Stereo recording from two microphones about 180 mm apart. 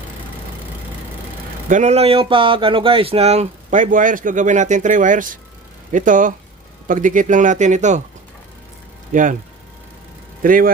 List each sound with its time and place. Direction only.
1.7 s speech: 40° right (ahead or behind)
9.1 s speech: 45° right (ahead or behind)
10.4 s speech: 50° right (ahead or behind)